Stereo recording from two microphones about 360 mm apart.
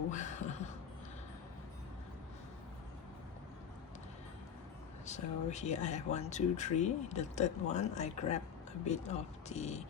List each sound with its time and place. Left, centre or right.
0.1 s speech: centre
5.0 s speech: centre